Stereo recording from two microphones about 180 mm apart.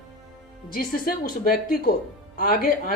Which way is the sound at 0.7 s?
55° left (ahead or behind).